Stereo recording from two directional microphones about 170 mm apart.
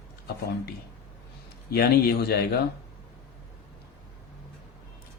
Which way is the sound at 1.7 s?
65° left (ahead or behind).